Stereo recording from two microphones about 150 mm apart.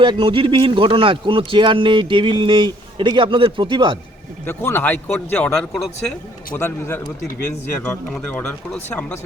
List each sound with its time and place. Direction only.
0.0 s a man's voice: 35° right (ahead or behind)
4.4 s speech: 15° left (ahead or behind)
6.6 s speech: 15° left (ahead or behind)
8.1 s speech: 5° left (ahead or behind)